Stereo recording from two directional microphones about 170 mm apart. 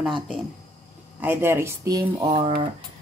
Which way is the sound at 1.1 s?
10° right (ahead or behind).